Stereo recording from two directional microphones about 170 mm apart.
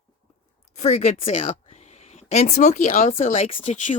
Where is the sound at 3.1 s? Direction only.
35° left (ahead or behind).